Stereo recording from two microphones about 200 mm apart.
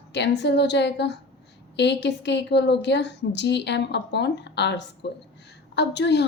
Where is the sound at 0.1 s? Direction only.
60° left (ahead or behind).